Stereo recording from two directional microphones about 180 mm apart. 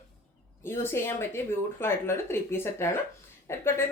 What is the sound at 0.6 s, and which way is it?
A woman's voice, 15° left (ahead or behind).